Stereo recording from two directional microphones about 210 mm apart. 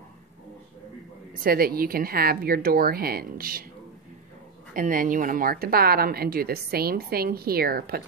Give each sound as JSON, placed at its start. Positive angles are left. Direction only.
{"t": 1.4, "sound": "a woman's voice", "side_deg": -45}
{"t": 4.7, "sound": "a woman's voice", "side_deg": -40}